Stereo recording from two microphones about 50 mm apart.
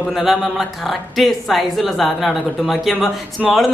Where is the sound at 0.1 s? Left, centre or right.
Centre.